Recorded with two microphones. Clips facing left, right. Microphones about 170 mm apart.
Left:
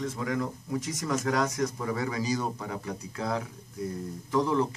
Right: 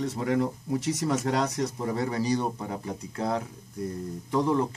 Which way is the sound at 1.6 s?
30° right (ahead or behind).